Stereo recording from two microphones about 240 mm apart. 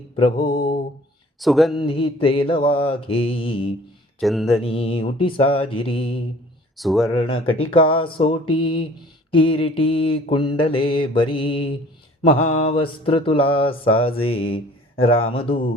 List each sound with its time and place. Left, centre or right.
0.2 s mantra: left
0.5 s mantra: left
1.4 s speech: centre
1.7 s mantra: left
4.2 s speech: centre
4.5 s mantra: left
6.7 s speech: centre
7.1 s mantra: left
7.4 s speech: left
7.7 s mantra: left